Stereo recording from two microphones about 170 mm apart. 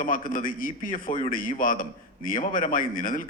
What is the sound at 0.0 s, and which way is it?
A man's voice, 55° left (ahead or behind).